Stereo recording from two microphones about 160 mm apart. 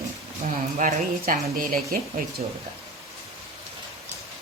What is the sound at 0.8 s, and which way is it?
Speech, 55° right (ahead or behind).